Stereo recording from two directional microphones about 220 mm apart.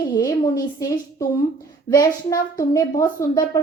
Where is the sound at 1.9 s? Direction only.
15° left (ahead or behind).